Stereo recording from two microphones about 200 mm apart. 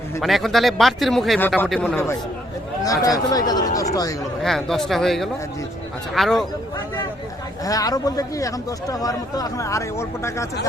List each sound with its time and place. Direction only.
0.2 s speech: centre (ahead or behind); by 4.3 s 15° left (ahead or behind)
4.4 s speech: centre (ahead or behind)
7.6 s speech: 20° left (ahead or behind)